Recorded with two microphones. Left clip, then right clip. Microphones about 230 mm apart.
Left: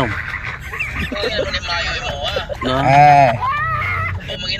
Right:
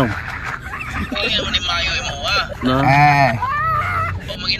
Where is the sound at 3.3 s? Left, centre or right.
Centre.